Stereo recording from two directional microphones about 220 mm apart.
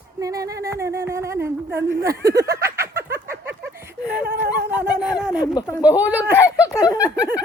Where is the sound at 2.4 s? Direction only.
15° right (ahead or behind).